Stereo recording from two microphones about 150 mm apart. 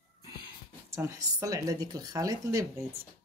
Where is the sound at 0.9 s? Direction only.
20° right (ahead or behind).